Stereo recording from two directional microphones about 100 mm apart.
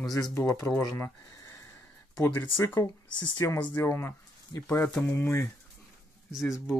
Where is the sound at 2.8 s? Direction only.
45° left (ahead or behind).